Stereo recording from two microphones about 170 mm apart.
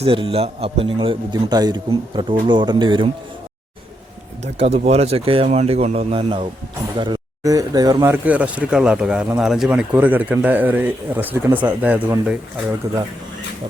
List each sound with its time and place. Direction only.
0.0 s a man's voice: 35° right (ahead or behind)
4.5 s speech: 35° right (ahead or behind); by 12.4 s 10° right (ahead or behind)
12.8 s a man's voice: 20° right (ahead or behind)